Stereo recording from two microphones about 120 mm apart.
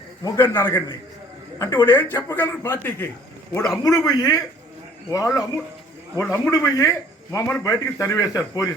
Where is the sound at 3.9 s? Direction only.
30° left (ahead or behind).